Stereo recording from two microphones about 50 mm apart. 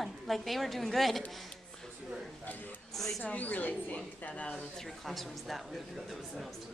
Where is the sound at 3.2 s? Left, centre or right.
Left.